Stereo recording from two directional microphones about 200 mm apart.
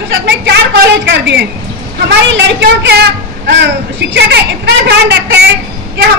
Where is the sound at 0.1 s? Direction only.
60° right (ahead or behind).